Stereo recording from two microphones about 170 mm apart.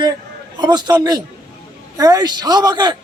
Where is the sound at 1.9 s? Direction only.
20° right (ahead or behind).